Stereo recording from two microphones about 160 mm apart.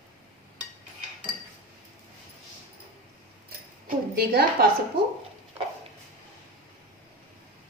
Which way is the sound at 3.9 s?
70° right (ahead or behind).